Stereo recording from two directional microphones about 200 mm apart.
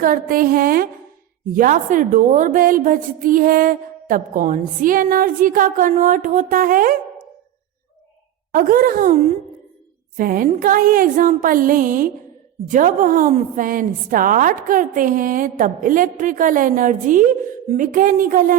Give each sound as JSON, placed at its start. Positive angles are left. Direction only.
{"t": 0.0, "sound": "a woman's voice", "side_deg": -45}
{"t": 8.5, "sound": "a woman's voice", "side_deg": -45}
{"t": 10.2, "sound": "a woman's voice", "side_deg": -45}